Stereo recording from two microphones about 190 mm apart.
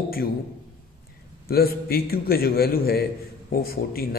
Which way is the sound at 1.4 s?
55° left (ahead or behind).